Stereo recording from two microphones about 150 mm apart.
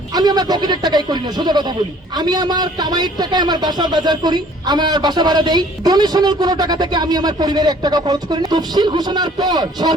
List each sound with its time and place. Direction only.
0.1 s a man's voice: 25° right (ahead or behind)